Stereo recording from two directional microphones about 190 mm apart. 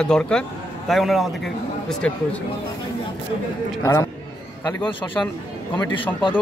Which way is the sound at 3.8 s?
15° left (ahead or behind).